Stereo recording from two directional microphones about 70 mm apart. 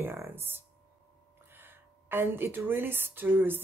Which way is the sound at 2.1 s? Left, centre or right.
Right.